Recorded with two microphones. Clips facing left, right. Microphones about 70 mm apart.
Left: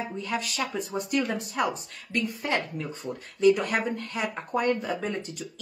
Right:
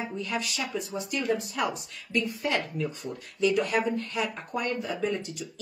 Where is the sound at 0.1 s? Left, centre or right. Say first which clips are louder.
Left 1 dB; left.